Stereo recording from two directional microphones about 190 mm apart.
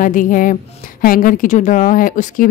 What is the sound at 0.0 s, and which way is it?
A woman's voice, 45° left (ahead or behind).